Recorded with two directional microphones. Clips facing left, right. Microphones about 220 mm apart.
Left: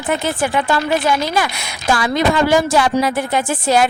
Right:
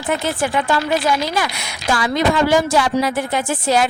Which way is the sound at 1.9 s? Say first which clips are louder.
Left 1 dB; 55° left (ahead or behind).